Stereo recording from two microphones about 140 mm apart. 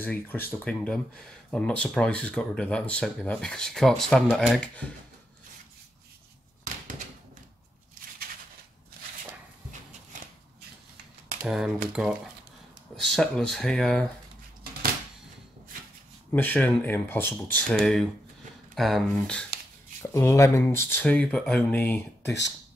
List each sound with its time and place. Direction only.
0.0 s speech: 15° left (ahead or behind)
11.4 s speech: 5° right (ahead or behind)
16.3 s speech: 15° left (ahead or behind)
20.0 s speech: 20° left (ahead or behind)